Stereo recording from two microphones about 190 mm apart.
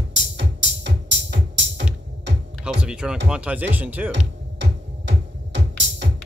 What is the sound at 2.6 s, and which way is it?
Music, 5° right (ahead or behind).